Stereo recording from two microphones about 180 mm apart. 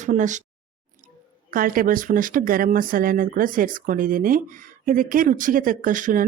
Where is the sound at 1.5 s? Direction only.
50° right (ahead or behind).